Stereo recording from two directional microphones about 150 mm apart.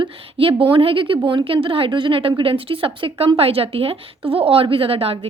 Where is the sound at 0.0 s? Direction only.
35° right (ahead or behind).